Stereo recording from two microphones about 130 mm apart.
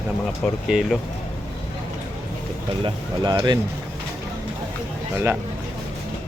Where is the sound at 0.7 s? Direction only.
5° right (ahead or behind).